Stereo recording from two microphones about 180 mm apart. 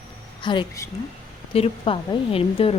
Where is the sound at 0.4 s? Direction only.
25° left (ahead or behind).